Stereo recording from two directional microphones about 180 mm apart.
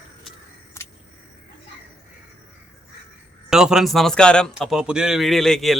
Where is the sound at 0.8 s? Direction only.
15° left (ahead or behind).